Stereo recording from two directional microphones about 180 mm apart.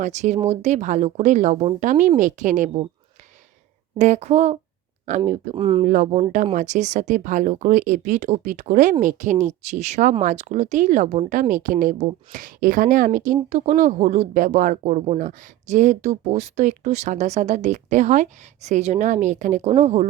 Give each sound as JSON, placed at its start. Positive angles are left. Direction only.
{"t": 0.0, "sound": "speech", "side_deg": -40}
{"t": 3.9, "sound": "speech", "side_deg": -40}
{"t": 5.5, "sound": "speech", "side_deg": -30}
{"t": 5.8, "sound": "speech", "side_deg": -45}